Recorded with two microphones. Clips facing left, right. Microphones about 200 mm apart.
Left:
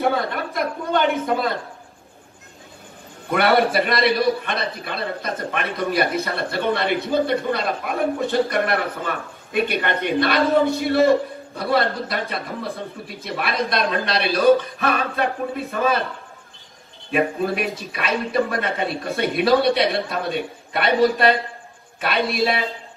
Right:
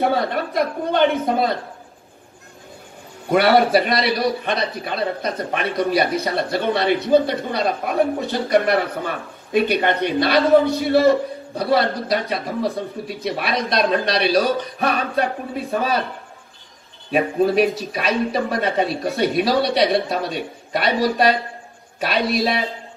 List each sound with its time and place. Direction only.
0.0 s a woman's voice: 50° left (ahead or behind)
3.3 s a man's voice: 55° left (ahead or behind)
17.7 s a man's voice: 55° left (ahead or behind)